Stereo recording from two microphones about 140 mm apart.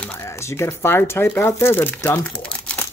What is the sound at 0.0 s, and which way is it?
Speech, 15° left (ahead or behind).